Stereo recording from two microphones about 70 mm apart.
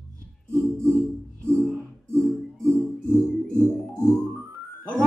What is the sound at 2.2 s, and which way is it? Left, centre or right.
Music, centre.